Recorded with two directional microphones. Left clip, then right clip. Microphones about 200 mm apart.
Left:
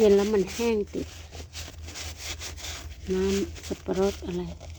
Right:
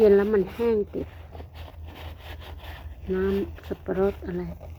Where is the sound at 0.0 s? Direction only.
20° left (ahead or behind).